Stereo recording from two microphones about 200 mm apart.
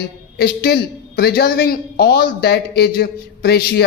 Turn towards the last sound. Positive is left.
turn(degrees=55)  # may be behind; listen again after turning